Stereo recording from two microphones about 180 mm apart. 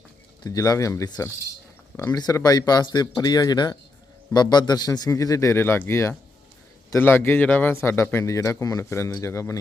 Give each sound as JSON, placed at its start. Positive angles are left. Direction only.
{"t": 0.4, "sound": "a man's voice", "side_deg": 20}